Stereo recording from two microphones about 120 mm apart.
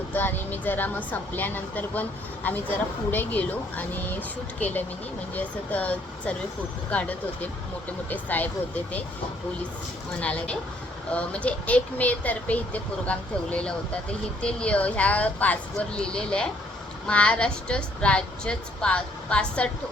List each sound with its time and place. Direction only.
0.1 s speech: 15° left (ahead or behind)
10.2 s speech: 10° left (ahead or behind)